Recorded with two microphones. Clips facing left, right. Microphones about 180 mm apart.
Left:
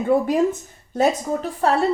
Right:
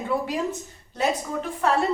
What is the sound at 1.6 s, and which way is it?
Speech, 35° left (ahead or behind).